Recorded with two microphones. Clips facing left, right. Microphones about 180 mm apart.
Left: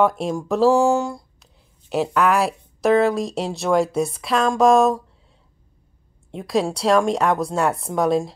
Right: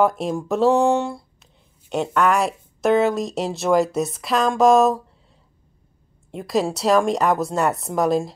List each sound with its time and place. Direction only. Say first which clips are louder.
0.0 s speech: even; centre (ahead or behind)
6.3 s speech: even; centre (ahead or behind)